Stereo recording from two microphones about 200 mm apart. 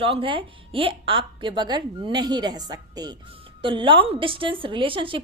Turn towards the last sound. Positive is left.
turn(degrees=-25)  # may be behind; listen again after turning